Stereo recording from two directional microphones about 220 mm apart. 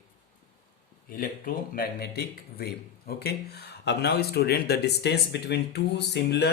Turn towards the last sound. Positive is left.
turn(degrees=50)  # may be behind; listen again after turning